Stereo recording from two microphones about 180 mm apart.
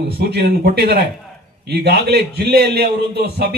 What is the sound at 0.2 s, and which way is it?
A man's voice, 65° right (ahead or behind).